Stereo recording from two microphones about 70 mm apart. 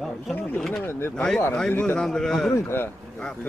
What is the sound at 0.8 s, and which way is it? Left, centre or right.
Speech, left.